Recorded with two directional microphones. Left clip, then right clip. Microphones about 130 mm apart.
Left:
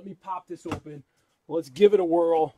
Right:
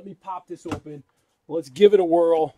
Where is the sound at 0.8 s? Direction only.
Centre (ahead or behind).